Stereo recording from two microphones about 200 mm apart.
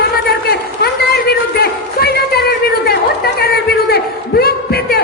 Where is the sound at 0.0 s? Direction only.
50° left (ahead or behind).